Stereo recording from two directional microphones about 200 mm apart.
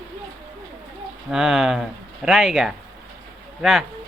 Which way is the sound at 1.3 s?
Centre (ahead or behind).